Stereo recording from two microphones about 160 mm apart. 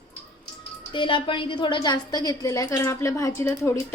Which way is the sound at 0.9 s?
30° left (ahead or behind).